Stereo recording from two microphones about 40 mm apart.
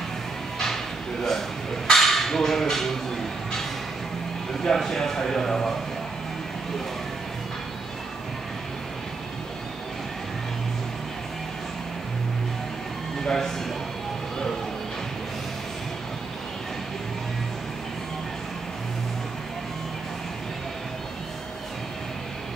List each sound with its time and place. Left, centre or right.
1.9 s speech: centre
4.6 s a man's voice: centre
13.2 s speech: centre